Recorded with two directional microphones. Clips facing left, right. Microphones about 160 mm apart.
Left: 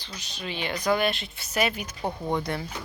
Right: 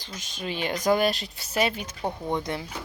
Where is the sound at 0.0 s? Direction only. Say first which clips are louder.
Right 2 dB; 45° right (ahead or behind).